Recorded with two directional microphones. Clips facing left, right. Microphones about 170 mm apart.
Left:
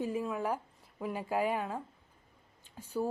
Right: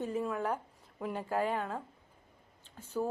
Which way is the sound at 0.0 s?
10° left (ahead or behind).